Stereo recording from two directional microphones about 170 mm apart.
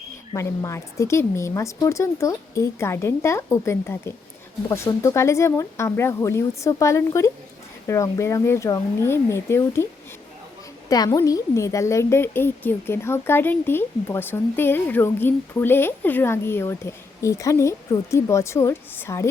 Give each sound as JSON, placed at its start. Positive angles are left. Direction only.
{"t": 0.3, "sound": "a woman's voice", "side_deg": 20}
{"t": 10.8, "sound": "a woman's voice", "side_deg": 20}